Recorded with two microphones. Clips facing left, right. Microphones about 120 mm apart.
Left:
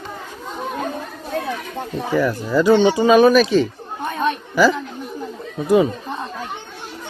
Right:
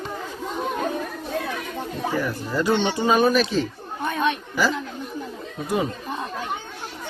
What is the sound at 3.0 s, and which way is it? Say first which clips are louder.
Speech: left 7 dB; 90° left.